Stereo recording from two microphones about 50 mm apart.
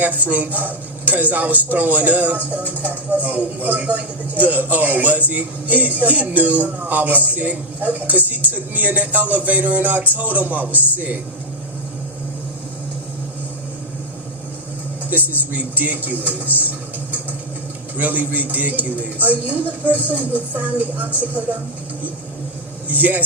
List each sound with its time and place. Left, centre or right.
0.0 s speech: right
15.1 s speech: right
17.9 s speech: right
22.9 s speech: right